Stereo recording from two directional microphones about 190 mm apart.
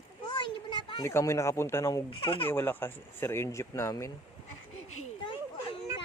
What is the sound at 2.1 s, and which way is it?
Speech, 30° left (ahead or behind).